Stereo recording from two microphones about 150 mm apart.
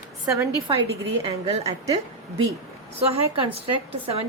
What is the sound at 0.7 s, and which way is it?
A woman's voice, 35° right (ahead or behind).